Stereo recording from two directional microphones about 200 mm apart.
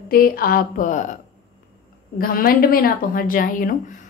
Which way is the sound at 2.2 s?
45° left (ahead or behind).